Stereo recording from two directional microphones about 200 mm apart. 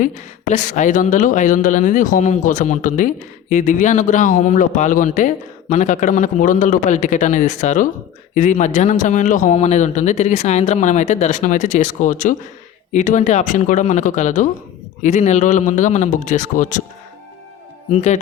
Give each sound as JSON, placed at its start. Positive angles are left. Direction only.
{"t": 0.0, "sound": "speech", "side_deg": 40}
{"t": 17.9, "sound": "speech", "side_deg": 35}